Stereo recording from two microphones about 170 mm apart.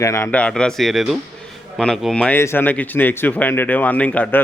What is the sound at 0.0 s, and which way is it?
Speech, 20° left (ahead or behind).